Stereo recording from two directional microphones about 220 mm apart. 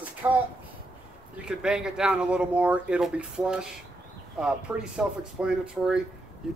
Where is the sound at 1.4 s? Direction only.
5° right (ahead or behind).